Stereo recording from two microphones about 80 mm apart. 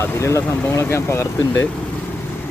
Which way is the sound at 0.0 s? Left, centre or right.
Left.